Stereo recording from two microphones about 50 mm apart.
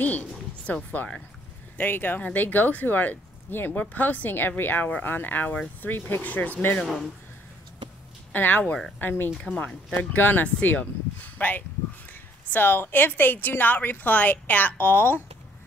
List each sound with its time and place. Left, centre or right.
0.0 s a sound: left
1.8 s a woman's voice: left
3.7 s a woman's voice: left
6.2 s a woman's voice: left
8.3 s a woman's voice: left